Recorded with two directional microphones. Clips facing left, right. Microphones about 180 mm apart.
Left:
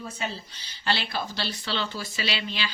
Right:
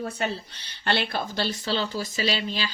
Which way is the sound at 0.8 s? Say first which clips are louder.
Right 3 dB; 55° right (ahead or behind).